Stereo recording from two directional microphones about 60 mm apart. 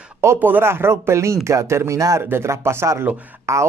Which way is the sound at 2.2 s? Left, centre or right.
Right.